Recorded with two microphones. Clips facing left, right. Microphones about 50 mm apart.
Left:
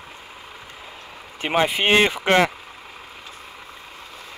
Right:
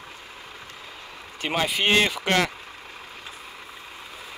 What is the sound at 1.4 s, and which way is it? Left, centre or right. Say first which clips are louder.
Speech: left 4 dB; left.